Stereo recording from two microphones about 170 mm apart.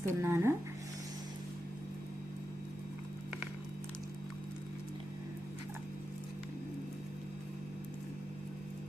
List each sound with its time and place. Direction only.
0.0 s speech: 15° right (ahead or behind)